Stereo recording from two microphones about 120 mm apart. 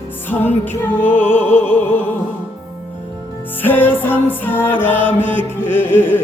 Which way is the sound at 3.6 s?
15° left (ahead or behind).